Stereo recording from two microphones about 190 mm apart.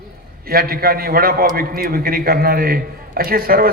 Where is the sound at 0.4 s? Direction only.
50° right (ahead or behind).